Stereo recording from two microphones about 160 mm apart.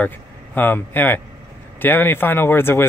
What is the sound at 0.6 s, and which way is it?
Speech, 10° left (ahead or behind).